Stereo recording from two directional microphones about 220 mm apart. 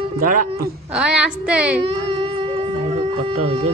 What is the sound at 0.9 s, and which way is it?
Speech, 5° right (ahead or behind).